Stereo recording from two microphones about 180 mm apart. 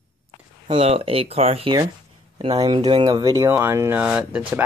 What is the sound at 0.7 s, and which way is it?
Speech, 30° right (ahead or behind).